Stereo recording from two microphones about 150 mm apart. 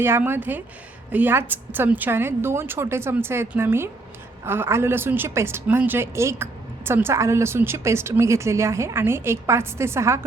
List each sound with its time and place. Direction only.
0.0 s a woman's voice: 15° right (ahead or behind)